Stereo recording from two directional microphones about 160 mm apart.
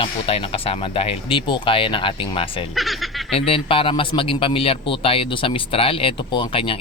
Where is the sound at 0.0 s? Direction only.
35° left (ahead or behind).